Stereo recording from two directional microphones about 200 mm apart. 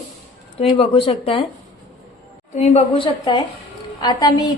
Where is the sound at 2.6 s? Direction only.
35° left (ahead or behind).